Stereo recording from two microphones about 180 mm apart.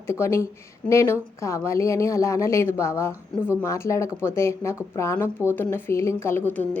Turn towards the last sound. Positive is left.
turn(degrees=10)  # may be behind; listen again after turning